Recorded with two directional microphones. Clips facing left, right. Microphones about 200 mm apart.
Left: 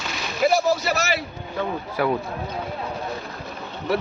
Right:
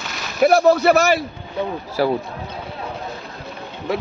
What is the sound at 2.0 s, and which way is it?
Speech, 30° right (ahead or behind).